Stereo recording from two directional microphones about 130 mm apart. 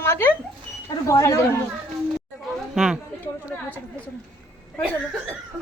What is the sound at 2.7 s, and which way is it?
Speech, 5° right (ahead or behind).